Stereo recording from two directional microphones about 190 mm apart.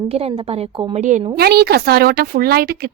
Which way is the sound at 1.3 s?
55° right (ahead or behind).